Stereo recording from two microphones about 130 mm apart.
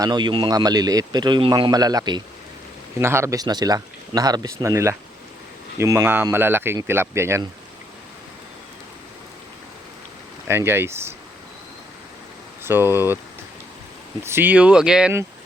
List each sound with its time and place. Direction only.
0.0 s speech: 35° right (ahead or behind)
3.0 s speech: 20° right (ahead or behind)
10.5 s speech: 20° right (ahead or behind)
12.6 s speech: 20° right (ahead or behind)
14.3 s speech: 15° right (ahead or behind)